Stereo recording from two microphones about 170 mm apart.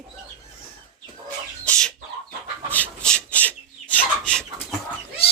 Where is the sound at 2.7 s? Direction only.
5° left (ahead or behind).